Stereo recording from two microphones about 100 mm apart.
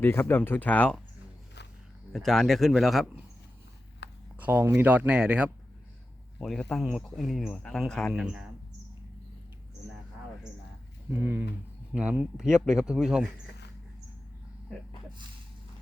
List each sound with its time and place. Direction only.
0.0 s speech: 20° left (ahead or behind)
2.1 s speech: centre (ahead or behind)
4.4 s a sound: 15° right (ahead or behind)
4.7 s speech: 15° right (ahead or behind)
6.4 s speech: 5° left (ahead or behind)
8.1 s speech: 5° right (ahead or behind)
11.1 s speech: 20° right (ahead or behind)